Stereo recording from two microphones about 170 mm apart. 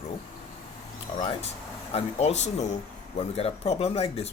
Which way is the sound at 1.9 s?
40° left (ahead or behind).